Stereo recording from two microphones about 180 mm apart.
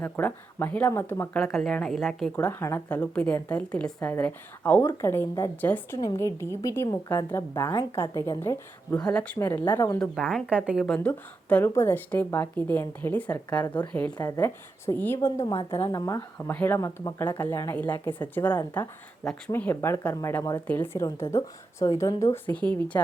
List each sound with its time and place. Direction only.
0.0 s speech: 10° left (ahead or behind)
1.4 s speech: centre (ahead or behind)
10.0 s speech: 5° left (ahead or behind)
14.2 s speech: 20° left (ahead or behind)